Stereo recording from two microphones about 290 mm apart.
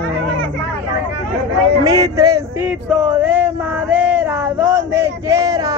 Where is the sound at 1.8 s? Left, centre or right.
Centre.